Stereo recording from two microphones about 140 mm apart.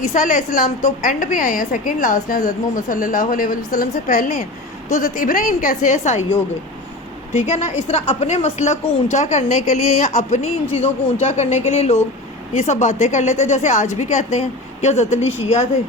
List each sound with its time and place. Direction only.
0.0 s a woman's voice: 70° left (ahead or behind)
7.3 s a woman's voice: 50° left (ahead or behind)